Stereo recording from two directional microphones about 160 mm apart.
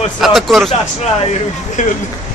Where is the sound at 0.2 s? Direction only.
Centre (ahead or behind).